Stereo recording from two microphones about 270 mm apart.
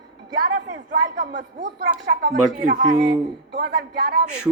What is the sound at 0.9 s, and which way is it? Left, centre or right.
Speech, right.